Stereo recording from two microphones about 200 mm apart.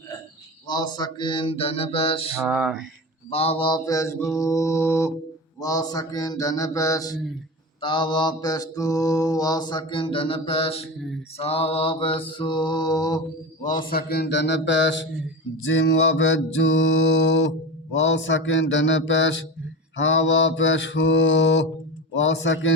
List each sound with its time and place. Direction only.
0.7 s mantra: 20° left (ahead or behind)
2.4 s a sound: 5° right (ahead or behind)
3.2 s mantra: 30° left (ahead or behind)
13.6 s a man's voice: 40° left (ahead or behind); by 15.0 s 65° left (ahead or behind)
15.6 s mantra: 70° left (ahead or behind)